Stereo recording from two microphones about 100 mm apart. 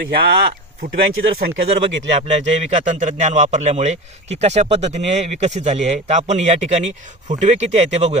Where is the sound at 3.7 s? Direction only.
90° right.